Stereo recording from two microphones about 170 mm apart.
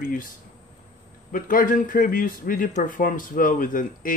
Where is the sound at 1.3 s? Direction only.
55° left (ahead or behind).